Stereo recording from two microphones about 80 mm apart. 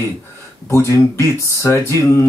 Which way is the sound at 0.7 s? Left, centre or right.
Left.